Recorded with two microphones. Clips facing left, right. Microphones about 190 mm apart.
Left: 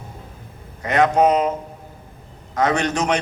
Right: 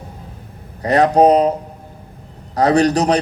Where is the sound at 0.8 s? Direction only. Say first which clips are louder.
Right 4 dB; 35° right (ahead or behind).